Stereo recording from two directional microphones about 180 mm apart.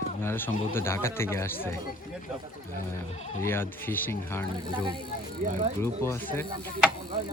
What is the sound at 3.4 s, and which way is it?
Speech, 10° left (ahead or behind).